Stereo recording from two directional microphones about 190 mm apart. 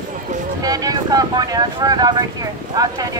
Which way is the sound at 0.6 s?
20° right (ahead or behind).